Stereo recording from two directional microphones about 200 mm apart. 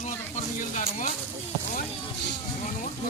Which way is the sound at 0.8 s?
40° left (ahead or behind).